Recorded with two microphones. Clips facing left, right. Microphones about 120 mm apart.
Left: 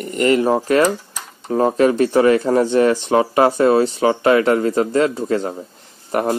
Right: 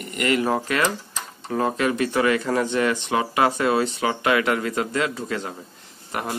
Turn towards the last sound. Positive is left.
turn(degrees=40)  # may be behind; listen again after turning